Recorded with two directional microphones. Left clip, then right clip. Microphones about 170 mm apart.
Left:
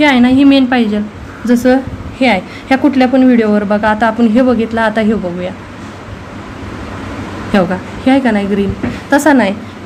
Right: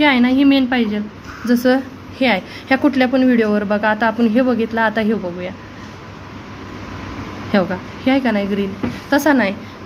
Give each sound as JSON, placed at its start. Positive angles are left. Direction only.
{"t": 0.0, "sound": "a woman's voice", "side_deg": -5}
{"t": 7.5, "sound": "a woman's voice", "side_deg": -5}